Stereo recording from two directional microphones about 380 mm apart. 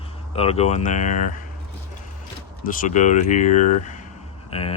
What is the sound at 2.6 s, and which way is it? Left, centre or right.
Speech, left.